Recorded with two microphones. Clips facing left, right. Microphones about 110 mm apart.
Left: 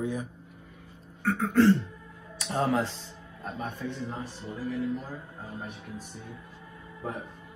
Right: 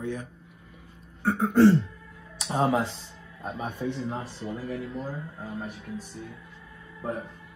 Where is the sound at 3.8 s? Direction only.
20° right (ahead or behind).